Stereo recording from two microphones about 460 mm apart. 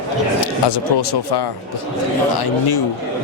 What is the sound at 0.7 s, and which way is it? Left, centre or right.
Speech, left.